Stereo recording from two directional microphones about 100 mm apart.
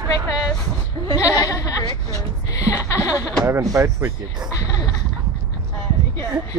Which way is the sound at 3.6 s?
35° right (ahead or behind).